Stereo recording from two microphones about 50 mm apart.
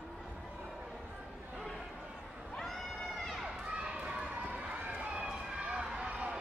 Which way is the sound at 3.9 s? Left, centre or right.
Right.